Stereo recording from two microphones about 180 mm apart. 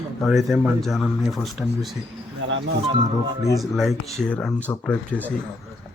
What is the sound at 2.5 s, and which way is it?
Speech, 90° right.